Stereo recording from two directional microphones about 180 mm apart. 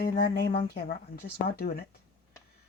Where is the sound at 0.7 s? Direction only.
60° left (ahead or behind).